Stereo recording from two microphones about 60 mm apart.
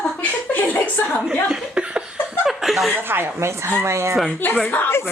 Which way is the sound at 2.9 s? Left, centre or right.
Right.